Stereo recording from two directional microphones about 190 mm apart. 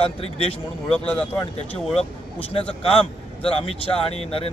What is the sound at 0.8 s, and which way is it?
Speech, 5° left (ahead or behind).